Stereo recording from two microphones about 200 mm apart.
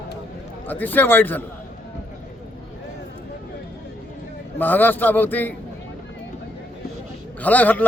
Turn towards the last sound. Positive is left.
turn(degrees=10)  # may be behind; listen again after turning